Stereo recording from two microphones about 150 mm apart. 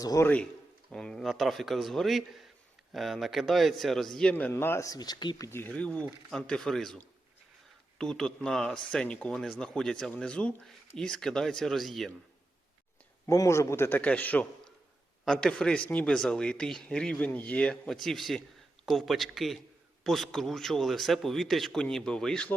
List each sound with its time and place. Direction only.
0.0 s a man's voice: 25° left (ahead or behind)
0.9 s speech: 5° left (ahead or behind); by 5.5 s 30° left (ahead or behind)
5.5 s a man's voice: 15° left (ahead or behind)
13.2 s a man's voice: 20° left (ahead or behind); by 22.5 s 5° left (ahead or behind)